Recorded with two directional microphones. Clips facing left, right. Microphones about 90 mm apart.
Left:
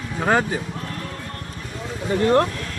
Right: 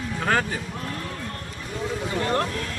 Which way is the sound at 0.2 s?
20° left (ahead or behind).